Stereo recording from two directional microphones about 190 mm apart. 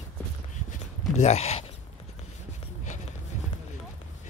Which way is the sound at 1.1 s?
35° left (ahead or behind).